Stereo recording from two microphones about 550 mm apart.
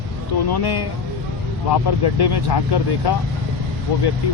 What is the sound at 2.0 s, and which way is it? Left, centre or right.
Speech, left.